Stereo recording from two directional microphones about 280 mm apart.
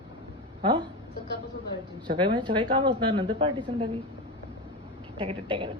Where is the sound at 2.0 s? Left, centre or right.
Centre.